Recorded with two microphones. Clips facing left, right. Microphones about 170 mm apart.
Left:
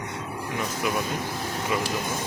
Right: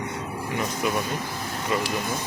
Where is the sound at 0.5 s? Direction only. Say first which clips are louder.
Right 1 dB; centre (ahead or behind).